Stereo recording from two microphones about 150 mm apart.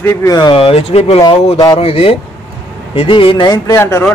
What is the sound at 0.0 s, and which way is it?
Speech, 25° left (ahead or behind).